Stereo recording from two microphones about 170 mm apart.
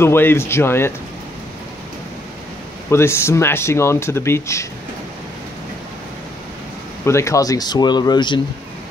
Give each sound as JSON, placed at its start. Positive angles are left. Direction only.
{"t": 0.0, "sound": "speech", "side_deg": 15}
{"t": 2.9, "sound": "speech", "side_deg": 15}
{"t": 7.1, "sound": "speech", "side_deg": 15}